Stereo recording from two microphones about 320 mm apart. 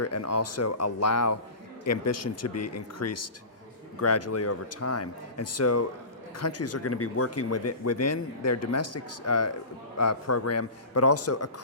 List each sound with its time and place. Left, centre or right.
0.0 s speech: left